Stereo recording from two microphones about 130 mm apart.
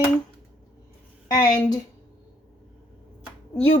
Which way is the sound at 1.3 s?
30° left (ahead or behind).